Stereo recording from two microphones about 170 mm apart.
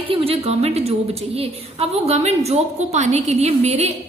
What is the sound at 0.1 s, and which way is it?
A woman's voice, 35° right (ahead or behind).